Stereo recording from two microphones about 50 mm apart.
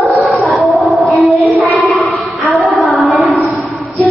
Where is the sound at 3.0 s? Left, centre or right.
Centre.